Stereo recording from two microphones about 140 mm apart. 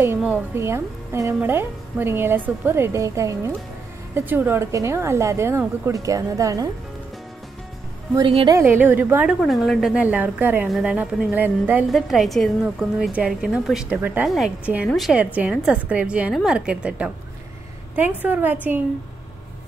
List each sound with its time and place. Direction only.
0.6 s a woman's voice: 20° right (ahead or behind)
8.6 s a woman's voice: 15° right (ahead or behind)
9.4 s a woman's voice: centre (ahead or behind)
11.9 s a woman's voice: centre (ahead or behind)